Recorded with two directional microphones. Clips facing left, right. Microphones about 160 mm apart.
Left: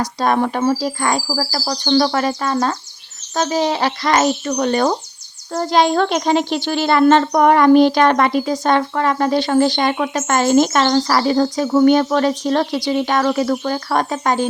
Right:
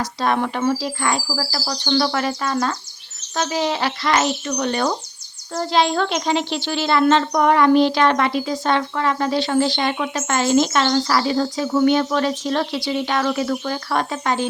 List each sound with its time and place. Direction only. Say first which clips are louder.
0.0 s speech: left 4 dB; 40° left (ahead or behind)